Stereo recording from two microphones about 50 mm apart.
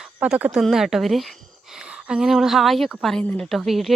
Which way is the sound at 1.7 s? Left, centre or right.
Centre.